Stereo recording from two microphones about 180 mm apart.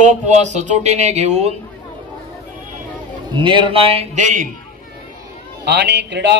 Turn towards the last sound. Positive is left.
turn(degrees=-80)